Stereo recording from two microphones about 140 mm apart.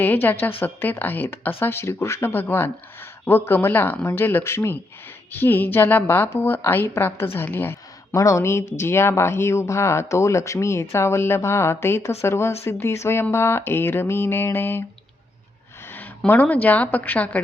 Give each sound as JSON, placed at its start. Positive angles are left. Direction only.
{"t": 0.0, "sound": "speech", "side_deg": 15}
{"t": 15.9, "sound": "a woman's voice", "side_deg": 15}